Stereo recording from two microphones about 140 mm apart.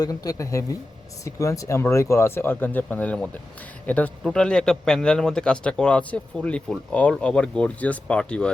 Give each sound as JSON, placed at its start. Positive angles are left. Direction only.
{"t": 0.0, "sound": "speech", "side_deg": 25}